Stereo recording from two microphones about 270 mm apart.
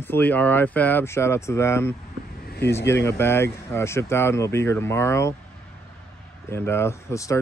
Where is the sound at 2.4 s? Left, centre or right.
Left.